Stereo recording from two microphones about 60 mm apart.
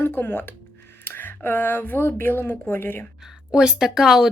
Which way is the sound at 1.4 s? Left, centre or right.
Left.